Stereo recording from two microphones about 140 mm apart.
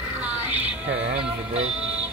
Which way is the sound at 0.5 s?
10° right (ahead or behind).